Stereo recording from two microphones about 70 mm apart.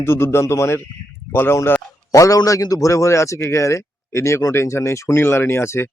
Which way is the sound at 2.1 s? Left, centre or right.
Left.